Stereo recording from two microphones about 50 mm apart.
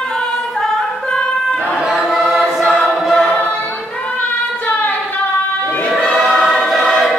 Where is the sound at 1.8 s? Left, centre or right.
Centre.